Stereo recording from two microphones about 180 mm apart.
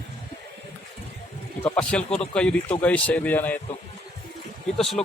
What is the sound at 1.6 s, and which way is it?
Speech, 5° left (ahead or behind).